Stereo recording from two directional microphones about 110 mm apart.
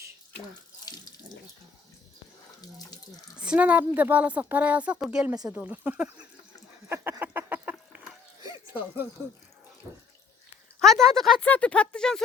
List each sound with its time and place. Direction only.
0.9 s sink: 35° left (ahead or behind)
2.6 s speech: 35° left (ahead or behind)
3.4 s speech: 10° right (ahead or behind)
6.8 s a sound: 20° right (ahead or behind)
9.9 s water tap: 30° right (ahead or behind)
10.8 s speech: 5° left (ahead or behind)